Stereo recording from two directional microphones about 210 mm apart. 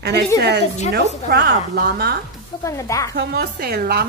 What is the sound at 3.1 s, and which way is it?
Speech, 55° right (ahead or behind).